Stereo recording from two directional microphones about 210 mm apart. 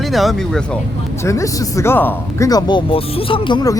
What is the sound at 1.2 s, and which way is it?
Speech, 15° left (ahead or behind).